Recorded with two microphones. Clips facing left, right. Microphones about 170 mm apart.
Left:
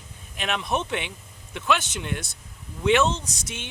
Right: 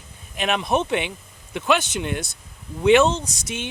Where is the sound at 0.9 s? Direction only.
10° right (ahead or behind).